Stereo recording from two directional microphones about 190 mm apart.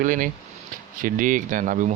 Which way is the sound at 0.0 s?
45° right (ahead or behind).